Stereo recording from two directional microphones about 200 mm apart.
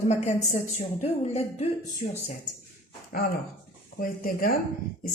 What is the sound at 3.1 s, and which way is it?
Speech, 45° left (ahead or behind).